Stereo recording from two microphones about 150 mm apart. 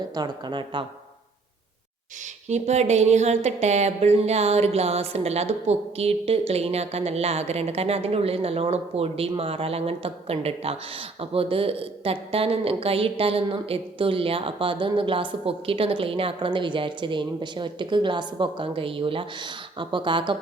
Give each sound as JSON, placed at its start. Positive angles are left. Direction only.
{"t": 0.1, "sound": "speech", "side_deg": -30}
{"t": 2.5, "sound": "a woman's voice", "side_deg": -50}